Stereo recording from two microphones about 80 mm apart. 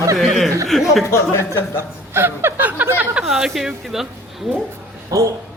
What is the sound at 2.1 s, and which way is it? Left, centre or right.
Speech, right.